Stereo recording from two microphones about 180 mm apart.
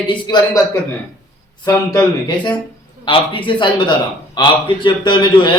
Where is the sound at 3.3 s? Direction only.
25° left (ahead or behind).